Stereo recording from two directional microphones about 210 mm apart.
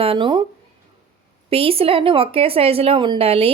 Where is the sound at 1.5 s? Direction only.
25° right (ahead or behind).